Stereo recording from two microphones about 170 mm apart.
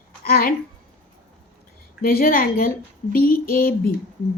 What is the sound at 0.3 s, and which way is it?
Speech, 60° left (ahead or behind).